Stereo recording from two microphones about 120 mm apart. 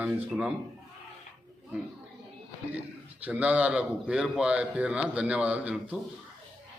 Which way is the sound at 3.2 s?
10° right (ahead or behind).